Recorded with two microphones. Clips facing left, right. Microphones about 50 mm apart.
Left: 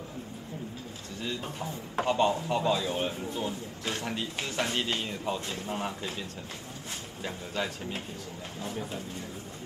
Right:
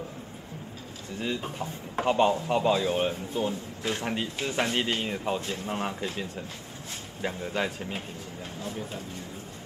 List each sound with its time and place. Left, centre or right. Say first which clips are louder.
1.2 s a man's voice: right 3 dB; centre
7.2 s a man's voice: right 4 dB; right